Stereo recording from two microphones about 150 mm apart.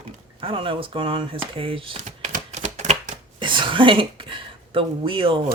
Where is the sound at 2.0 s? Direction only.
50° right (ahead or behind).